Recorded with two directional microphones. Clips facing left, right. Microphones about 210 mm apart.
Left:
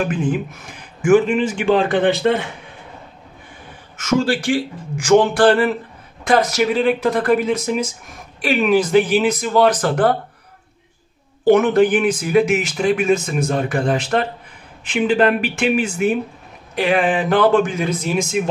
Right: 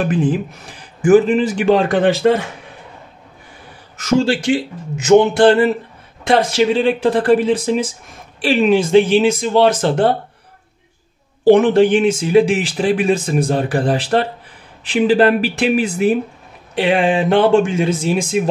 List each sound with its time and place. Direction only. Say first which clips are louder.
0.1 s speech: right 3 dB; 35° right (ahead or behind)
4.0 s speech: right 3 dB; 30° right (ahead or behind)
11.4 s speech: right 3 dB; 30° right (ahead or behind)